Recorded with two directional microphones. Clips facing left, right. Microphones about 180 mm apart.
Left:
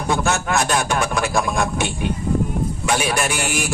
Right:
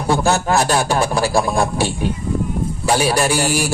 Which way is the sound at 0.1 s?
35° right (ahead or behind).